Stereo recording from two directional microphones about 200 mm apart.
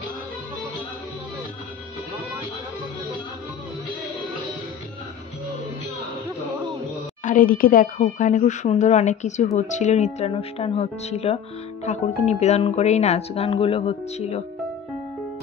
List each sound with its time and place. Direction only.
7.2 s speech: 45° left (ahead or behind)